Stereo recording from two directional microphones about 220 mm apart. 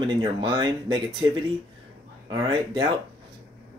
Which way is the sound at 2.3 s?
20° right (ahead or behind).